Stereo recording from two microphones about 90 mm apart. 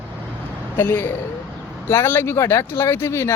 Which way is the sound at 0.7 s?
25° left (ahead or behind).